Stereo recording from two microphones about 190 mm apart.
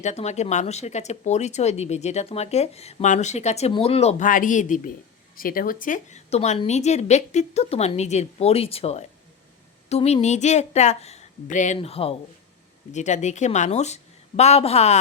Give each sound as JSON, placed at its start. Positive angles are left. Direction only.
{"t": 0.0, "sound": "speech", "side_deg": 35}